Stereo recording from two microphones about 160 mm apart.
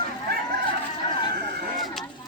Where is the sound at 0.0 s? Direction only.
75° right (ahead or behind).